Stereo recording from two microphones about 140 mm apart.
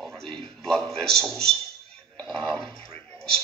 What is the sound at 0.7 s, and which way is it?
Speech, 5° left (ahead or behind).